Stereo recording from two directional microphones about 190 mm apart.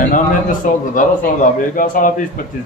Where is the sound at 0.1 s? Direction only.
45° left (ahead or behind).